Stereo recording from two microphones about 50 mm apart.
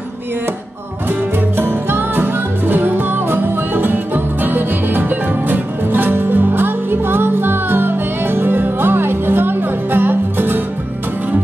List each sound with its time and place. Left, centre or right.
1.6 s music: right